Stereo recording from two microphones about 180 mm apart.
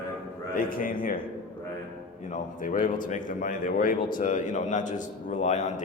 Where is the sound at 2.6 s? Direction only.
45° left (ahead or behind).